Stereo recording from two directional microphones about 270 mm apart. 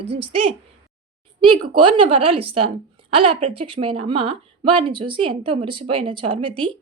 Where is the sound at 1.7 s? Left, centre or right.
Centre.